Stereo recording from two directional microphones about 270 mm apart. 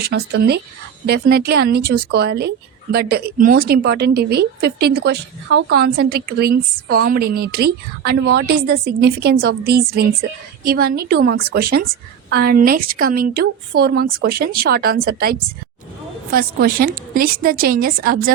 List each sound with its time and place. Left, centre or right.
0.0 s speech: right